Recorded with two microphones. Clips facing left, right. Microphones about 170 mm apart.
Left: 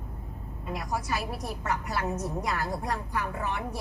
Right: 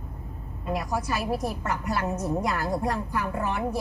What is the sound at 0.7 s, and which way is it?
A woman's voice, 50° right (ahead or behind).